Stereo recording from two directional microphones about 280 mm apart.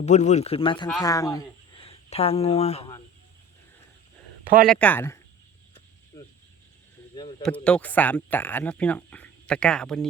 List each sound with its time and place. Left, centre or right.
0.0 s speech: left
0.9 s speech: centre
4.7 s speech: centre
7.4 s speech: centre